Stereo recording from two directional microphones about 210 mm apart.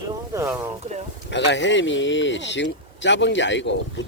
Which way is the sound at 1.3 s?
55° left (ahead or behind).